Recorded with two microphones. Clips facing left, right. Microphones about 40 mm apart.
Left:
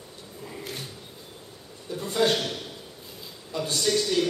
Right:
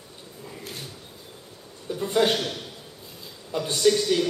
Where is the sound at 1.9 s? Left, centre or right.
Centre.